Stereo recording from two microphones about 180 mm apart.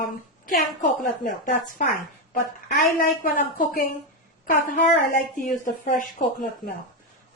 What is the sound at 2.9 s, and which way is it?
Speech, 50° left (ahead or behind).